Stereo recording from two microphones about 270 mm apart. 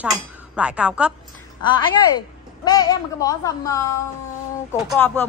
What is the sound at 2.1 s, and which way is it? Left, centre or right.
A woman's voice, centre.